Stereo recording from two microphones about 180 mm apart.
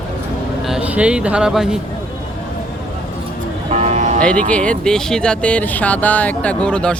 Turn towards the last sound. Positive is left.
turn(degrees=5)  # may be behind; listen again after turning